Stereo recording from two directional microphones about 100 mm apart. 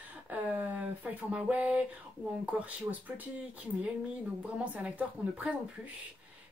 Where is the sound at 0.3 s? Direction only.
15° right (ahead or behind).